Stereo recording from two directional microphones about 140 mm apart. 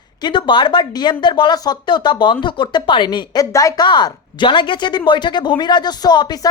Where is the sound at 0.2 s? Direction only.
35° left (ahead or behind).